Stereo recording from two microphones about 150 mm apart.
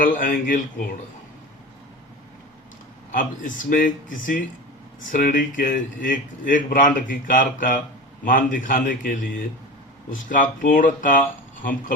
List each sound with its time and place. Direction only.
0.0 s a man's voice: 65° left (ahead or behind)
3.1 s a man's voice: 60° left (ahead or behind)